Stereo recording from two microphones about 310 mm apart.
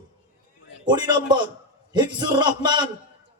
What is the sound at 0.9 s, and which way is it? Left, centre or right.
A man's voice, centre.